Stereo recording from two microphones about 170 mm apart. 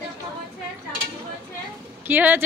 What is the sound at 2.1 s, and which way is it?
Speech, 10° right (ahead or behind).